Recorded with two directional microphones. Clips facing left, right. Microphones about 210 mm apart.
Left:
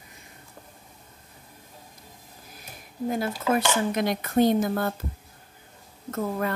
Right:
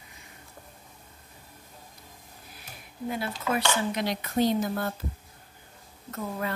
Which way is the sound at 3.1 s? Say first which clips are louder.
Left 5 dB; 45° left (ahead or behind).